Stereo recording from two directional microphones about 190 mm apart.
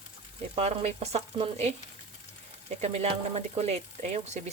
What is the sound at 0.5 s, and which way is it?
Speech, 35° right (ahead or behind).